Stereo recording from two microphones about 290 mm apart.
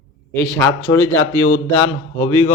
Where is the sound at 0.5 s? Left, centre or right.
Centre.